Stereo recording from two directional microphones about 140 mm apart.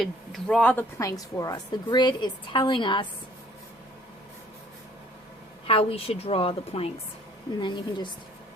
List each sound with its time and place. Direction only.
0.0 s speech: centre (ahead or behind)
0.9 s a woman's voice: 25° left (ahead or behind)
5.6 s a woman's voice: 45° left (ahead or behind)